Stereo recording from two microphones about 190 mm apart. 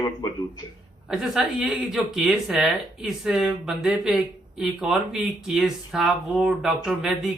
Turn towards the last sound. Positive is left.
turn(degrees=0)  # may be behind; listen again after turning